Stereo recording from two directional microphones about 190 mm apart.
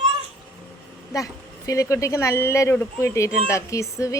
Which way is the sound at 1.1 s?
15° left (ahead or behind).